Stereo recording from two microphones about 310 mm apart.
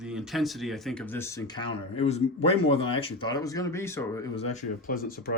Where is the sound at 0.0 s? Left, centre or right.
Centre.